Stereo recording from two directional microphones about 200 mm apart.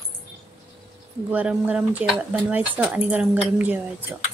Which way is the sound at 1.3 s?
10° right (ahead or behind).